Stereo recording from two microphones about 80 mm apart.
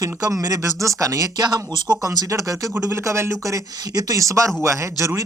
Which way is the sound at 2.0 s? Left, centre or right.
Right.